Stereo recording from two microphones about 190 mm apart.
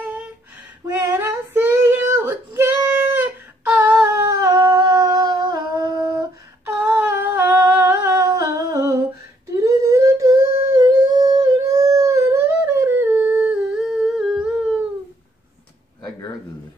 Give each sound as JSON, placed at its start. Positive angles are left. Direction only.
{"t": 0.8, "sound": "child singing", "side_deg": -10}
{"t": 6.8, "sound": "humming", "side_deg": -10}